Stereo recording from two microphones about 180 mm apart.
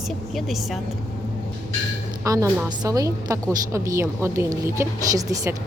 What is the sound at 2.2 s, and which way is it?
A woman's voice, 15° right (ahead or behind).